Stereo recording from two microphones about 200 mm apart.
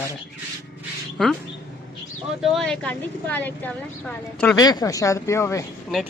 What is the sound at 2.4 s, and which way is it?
A woman's voice, centre (ahead or behind).